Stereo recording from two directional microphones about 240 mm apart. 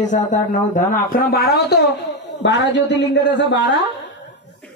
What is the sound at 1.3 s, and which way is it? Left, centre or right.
A man's voice, left.